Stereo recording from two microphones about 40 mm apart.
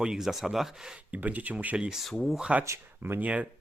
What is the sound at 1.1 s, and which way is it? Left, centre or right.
Speech, right.